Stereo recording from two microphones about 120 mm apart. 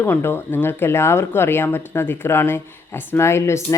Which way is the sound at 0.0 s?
20° left (ahead or behind).